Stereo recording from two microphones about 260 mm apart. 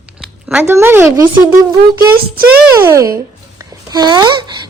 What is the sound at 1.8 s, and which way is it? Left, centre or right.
Speech, right.